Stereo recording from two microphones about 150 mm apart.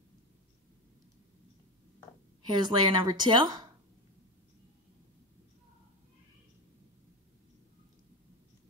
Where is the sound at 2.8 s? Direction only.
30° right (ahead or behind).